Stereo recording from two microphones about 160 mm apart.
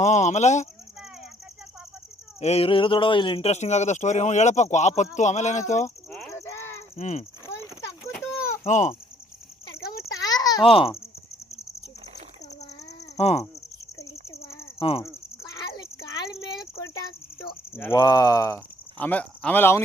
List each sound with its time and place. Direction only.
0.0 s speech: 50° left (ahead or behind)
2.4 s speech: 40° left (ahead or behind)
6.4 s a sound: 15° left (ahead or behind)
6.9 s speech: 50° left (ahead or behind)
8.6 s speech: 50° left (ahead or behind)
10.2 s a sound: 25° left (ahead or behind)
10.7 s a child's voice: 35° left (ahead or behind)
13.1 s speech: 40° left (ahead or behind)
14.0 s a sound: 20° left (ahead or behind)
14.8 s speech: 35° left (ahead or behind)
16.3 s a sound: 20° left (ahead or behind)
17.7 s speech: 15° left (ahead or behind)